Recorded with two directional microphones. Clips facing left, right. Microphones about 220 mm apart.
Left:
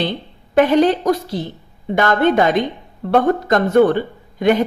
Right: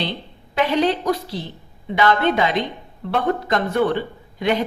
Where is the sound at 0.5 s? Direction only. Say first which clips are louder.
Left 6 dB; 50° left (ahead or behind).